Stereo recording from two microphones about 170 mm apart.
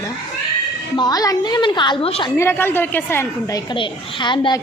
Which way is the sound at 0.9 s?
25° left (ahead or behind).